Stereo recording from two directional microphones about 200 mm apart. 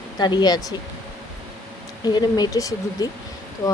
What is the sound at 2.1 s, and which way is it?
Speech, 20° left (ahead or behind).